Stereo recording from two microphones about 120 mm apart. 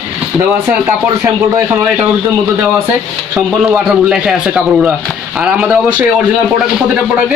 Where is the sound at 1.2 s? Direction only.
20° right (ahead or behind).